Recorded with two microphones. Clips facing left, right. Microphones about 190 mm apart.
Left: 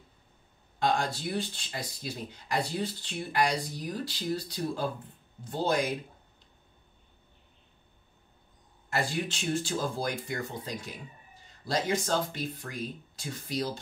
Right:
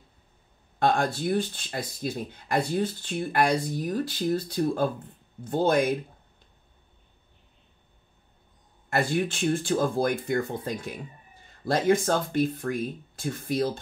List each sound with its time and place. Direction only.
0.7 s speech: 55° right (ahead or behind)
8.9 s speech: 55° right (ahead or behind)